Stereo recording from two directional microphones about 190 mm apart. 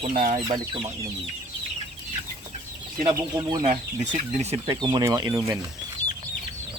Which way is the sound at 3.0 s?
25° right (ahead or behind).